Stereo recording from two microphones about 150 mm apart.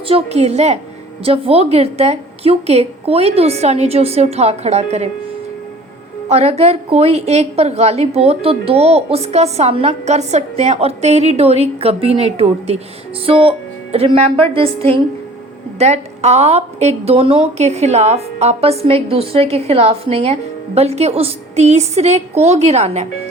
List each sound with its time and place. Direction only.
0.1 s a woman's voice: 45° right (ahead or behind)
6.2 s a woman's voice: 45° right (ahead or behind)